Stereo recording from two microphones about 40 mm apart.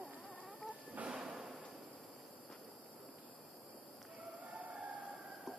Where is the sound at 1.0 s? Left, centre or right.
Centre.